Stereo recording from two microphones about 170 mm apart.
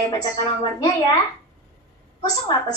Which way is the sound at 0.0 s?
25° left (ahead or behind).